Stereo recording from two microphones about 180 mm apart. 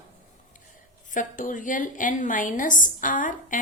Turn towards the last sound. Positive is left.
turn(degrees=45)  # may be behind; listen again after turning